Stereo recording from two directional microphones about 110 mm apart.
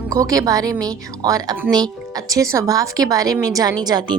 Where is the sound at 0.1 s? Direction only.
30° right (ahead or behind).